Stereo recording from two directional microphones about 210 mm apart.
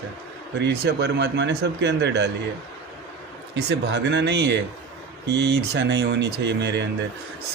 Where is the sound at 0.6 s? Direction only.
55° right (ahead or behind).